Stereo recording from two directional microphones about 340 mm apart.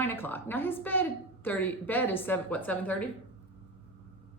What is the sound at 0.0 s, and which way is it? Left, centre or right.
Speech, centre.